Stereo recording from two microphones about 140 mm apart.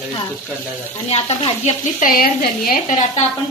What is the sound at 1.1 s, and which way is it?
Speech, 50° left (ahead or behind).